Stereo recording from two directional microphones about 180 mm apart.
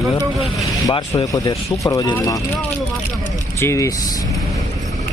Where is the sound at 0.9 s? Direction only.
20° left (ahead or behind).